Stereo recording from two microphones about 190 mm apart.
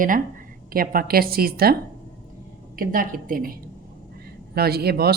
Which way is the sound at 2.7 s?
50° right (ahead or behind).